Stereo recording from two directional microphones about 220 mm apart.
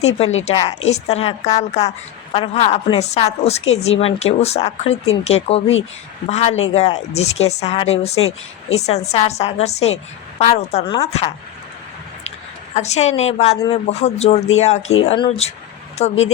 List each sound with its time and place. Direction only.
0.8 s a woman's voice: 30° left (ahead or behind)
12.7 s a woman's voice: 30° left (ahead or behind)